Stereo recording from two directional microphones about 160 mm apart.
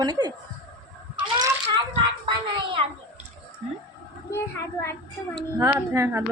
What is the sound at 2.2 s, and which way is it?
Child singing, 30° right (ahead or behind).